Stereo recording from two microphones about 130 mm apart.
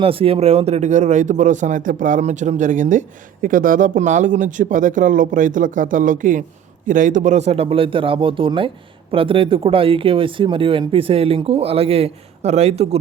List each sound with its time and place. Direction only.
0.0 s speech: 45° right (ahead or behind); by 3.0 s 75° right (ahead or behind)
3.4 s speech: 90° right; by 13.0 s 50° right (ahead or behind)